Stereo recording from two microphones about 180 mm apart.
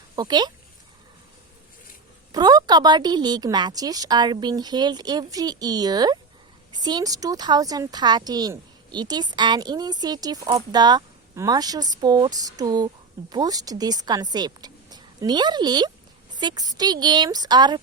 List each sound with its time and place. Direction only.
0.2 s speech: 25° right (ahead or behind)
2.3 s a woman's voice: 20° right (ahead or behind)